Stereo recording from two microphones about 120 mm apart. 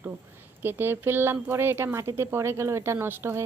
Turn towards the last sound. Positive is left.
turn(degrees=-20)  # may be behind; listen again after turning